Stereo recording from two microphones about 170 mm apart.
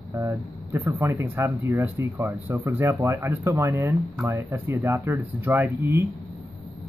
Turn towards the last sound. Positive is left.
turn(degrees=-15)  # may be behind; listen again after turning